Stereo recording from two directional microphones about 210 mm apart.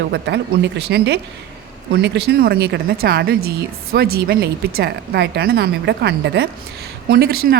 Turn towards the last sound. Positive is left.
turn(degrees=-45)  # may be behind; listen again after turning